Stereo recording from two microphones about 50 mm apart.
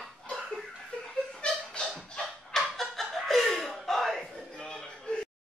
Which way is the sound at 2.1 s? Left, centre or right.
Centre.